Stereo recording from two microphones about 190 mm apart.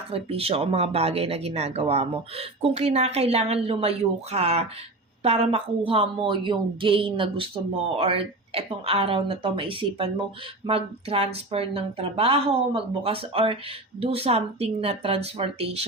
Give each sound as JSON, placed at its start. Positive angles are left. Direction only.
{"t": 0.1, "sound": "a woman's voice", "side_deg": -30}